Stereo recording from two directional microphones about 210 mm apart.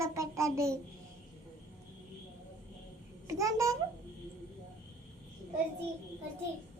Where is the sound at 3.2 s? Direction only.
15° right (ahead or behind).